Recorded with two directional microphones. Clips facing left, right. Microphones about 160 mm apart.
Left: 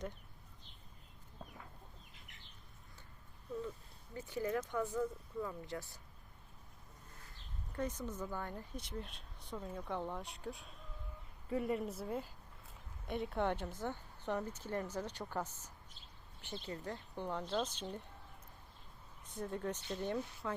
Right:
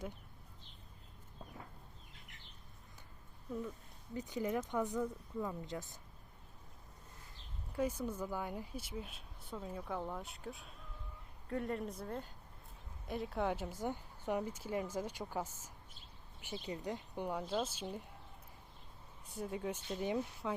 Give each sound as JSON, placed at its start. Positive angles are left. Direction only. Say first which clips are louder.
{"t": 4.1, "sound": "speech", "louder": "right 1 dB", "side_deg": -20}
{"t": 7.7, "sound": "speech", "louder": "right 3 dB", "side_deg": -10}
{"t": 19.4, "sound": "speech", "louder": "even", "side_deg": -5}